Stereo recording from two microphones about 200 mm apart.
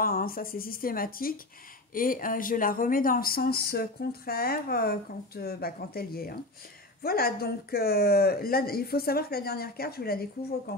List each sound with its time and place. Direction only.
0.0 s speech: 45° left (ahead or behind)